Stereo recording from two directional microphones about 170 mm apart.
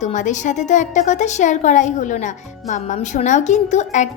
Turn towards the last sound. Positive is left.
turn(degrees=45)  # may be behind; listen again after turning